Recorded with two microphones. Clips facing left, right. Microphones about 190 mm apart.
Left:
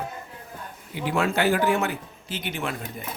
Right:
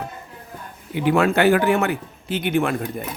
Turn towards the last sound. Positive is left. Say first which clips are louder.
# right 10 dB
turn(degrees=-55)  # may be behind; listen again after turning